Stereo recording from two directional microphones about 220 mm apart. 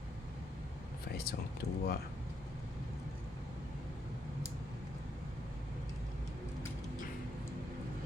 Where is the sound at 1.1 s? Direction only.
45° left (ahead or behind).